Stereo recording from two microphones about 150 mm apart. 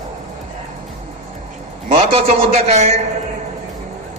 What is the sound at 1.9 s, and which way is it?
A man's voice, 40° right (ahead or behind).